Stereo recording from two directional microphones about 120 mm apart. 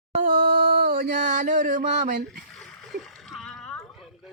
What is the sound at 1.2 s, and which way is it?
Music, 90° right.